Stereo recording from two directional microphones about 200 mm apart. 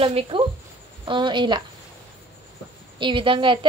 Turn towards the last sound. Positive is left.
turn(degrees=-25)  # may be behind; listen again after turning